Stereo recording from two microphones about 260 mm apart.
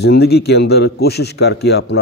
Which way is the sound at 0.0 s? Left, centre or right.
Left.